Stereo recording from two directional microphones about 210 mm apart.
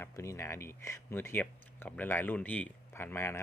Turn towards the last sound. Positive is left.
turn(degrees=10)  # may be behind; listen again after turning